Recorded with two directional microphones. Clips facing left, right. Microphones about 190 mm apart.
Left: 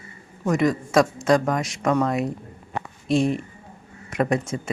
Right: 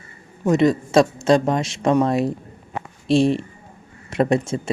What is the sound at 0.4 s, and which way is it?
Speech, 25° right (ahead or behind).